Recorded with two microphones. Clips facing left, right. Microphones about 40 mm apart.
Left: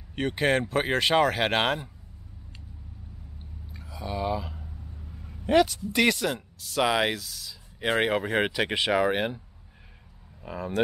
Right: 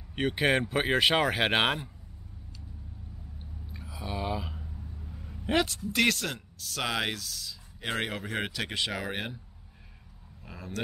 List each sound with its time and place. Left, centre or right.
0.1 s speech: centre
3.7 s a sound: centre
5.4 s speech: centre
7.8 s speech: left
10.4 s speech: centre